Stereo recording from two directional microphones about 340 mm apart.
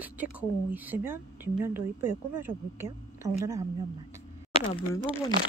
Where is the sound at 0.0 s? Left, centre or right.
Centre.